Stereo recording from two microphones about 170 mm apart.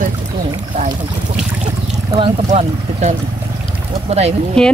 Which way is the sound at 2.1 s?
35° right (ahead or behind).